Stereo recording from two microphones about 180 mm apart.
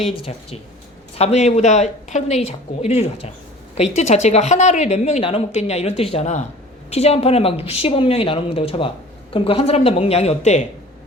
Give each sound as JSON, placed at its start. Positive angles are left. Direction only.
{"t": 1.1, "sound": "a woman's voice", "side_deg": 35}